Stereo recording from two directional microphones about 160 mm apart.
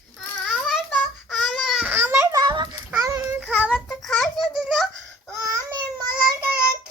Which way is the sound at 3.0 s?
15° right (ahead or behind).